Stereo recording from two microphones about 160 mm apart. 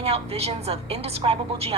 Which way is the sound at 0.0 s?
40° right (ahead or behind).